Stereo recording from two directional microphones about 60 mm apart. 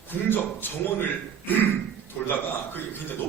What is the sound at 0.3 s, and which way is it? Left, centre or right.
Speech, left.